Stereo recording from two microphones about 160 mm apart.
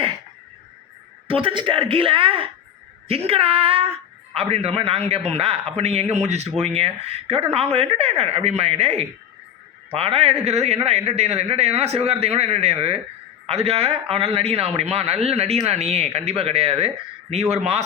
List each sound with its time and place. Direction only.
1.3 s a man's voice: 35° right (ahead or behind)